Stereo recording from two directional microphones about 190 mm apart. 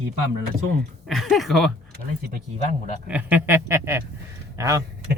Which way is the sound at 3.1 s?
10° right (ahead or behind).